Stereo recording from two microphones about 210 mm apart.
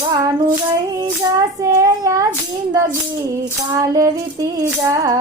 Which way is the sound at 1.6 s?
15° right (ahead or behind).